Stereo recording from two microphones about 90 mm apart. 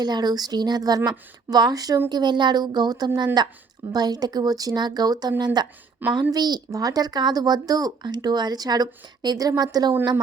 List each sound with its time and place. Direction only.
0.0 s speech: 50° right (ahead or behind)
6.0 s a woman's voice: 20° right (ahead or behind)
6.3 s speech: 50° right (ahead or behind)